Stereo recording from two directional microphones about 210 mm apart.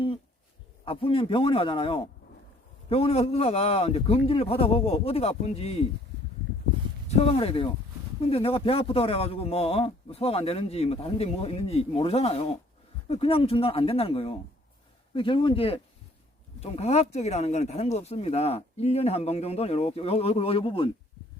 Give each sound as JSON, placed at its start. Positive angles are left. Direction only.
{"t": 0.9, "sound": "a man's voice", "side_deg": 25}
{"t": 7.1, "sound": "a man's voice", "side_deg": 30}